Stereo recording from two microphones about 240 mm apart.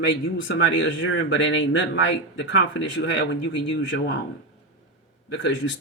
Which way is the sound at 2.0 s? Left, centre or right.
Left.